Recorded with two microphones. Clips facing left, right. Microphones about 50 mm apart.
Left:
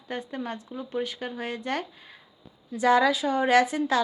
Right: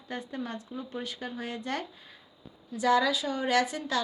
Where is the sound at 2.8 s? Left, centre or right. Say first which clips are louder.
Left 4 dB; left.